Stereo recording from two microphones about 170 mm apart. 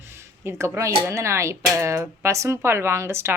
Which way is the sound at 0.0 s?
15° right (ahead or behind).